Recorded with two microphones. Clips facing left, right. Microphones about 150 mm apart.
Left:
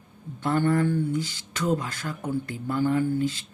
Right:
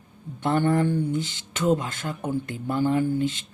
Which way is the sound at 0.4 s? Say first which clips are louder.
Right 1 dB; 20° right (ahead or behind).